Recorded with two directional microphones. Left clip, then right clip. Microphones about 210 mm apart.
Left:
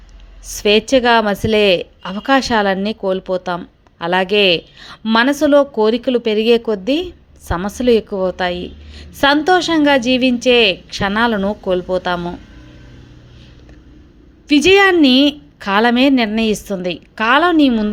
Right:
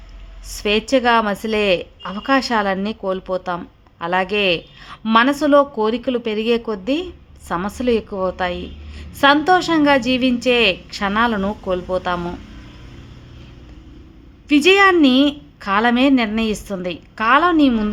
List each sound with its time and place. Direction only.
0.4 s a woman's voice: 15° left (ahead or behind)
14.4 s a woman's voice: 15° left (ahead or behind)